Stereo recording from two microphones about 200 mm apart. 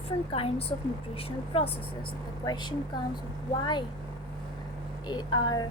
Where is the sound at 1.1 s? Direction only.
30° left (ahead or behind).